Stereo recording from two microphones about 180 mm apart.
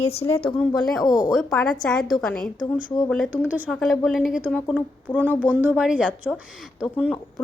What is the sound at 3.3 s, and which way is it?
A woman's voice, 10° right (ahead or behind).